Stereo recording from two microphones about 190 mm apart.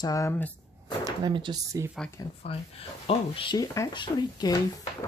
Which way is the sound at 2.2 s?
20° left (ahead or behind).